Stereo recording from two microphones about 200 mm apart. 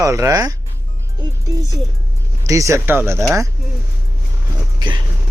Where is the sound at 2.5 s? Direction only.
15° right (ahead or behind).